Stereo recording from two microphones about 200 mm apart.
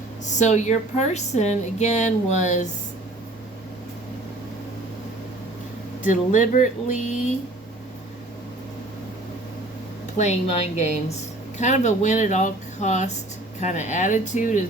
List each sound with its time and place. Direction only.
0.3 s speech: 35° left (ahead or behind)
6.1 s speech: 40° left (ahead or behind)
10.2 s speech: 35° left (ahead or behind)